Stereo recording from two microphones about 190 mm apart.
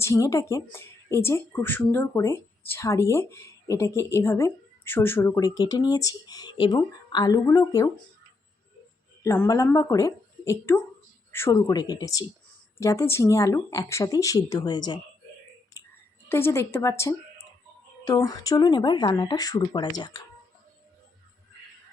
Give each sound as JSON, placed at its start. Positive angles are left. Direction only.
{"t": 0.0, "sound": "speech", "side_deg": 15}
{"t": 9.2, "sound": "speech", "side_deg": 10}
{"t": 16.3, "sound": "speech", "side_deg": 15}